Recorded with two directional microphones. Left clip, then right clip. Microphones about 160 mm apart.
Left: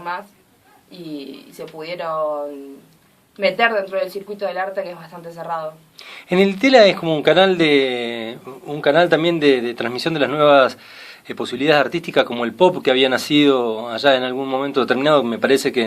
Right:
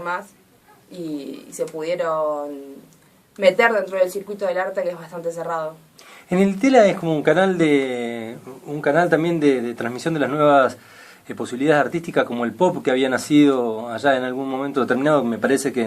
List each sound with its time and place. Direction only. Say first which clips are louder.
0.9 s speech: right 2 dB; centre (ahead or behind)
6.2 s speech: left 3 dB; 30° left (ahead or behind)